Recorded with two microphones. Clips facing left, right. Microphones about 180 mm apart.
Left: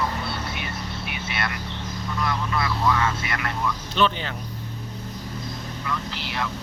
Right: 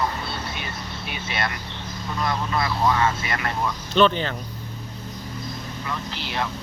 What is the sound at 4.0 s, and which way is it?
Speech, 10° left (ahead or behind).